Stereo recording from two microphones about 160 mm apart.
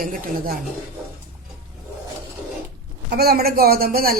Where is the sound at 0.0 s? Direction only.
60° right (ahead or behind).